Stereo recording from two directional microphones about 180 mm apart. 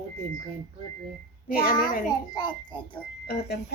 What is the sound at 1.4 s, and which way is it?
Speech, 55° left (ahead or behind).